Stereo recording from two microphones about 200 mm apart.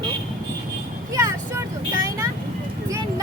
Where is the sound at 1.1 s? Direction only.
15° right (ahead or behind).